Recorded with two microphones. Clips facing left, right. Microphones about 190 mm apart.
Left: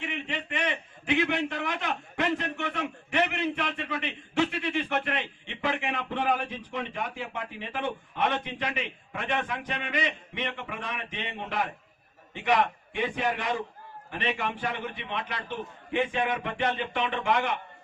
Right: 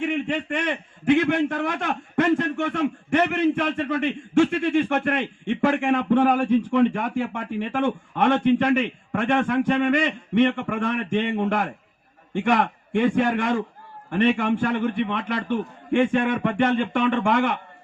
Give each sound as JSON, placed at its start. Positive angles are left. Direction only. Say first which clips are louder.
{"t": 0.0, "sound": "a man's voice", "louder": "right 10 dB", "side_deg": -45}